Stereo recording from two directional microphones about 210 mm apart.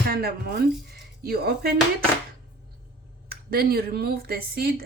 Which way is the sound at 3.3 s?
45° right (ahead or behind).